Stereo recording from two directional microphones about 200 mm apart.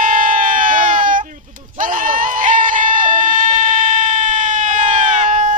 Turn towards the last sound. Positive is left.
turn(degrees=-35)  # may be behind; listen again after turning